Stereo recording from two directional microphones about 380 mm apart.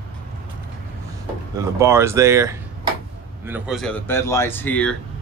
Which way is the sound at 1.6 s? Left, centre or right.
Centre.